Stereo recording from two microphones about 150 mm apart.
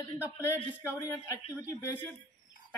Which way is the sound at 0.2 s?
15° left (ahead or behind).